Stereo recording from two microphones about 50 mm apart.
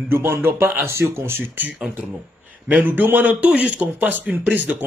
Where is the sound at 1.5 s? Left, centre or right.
Right.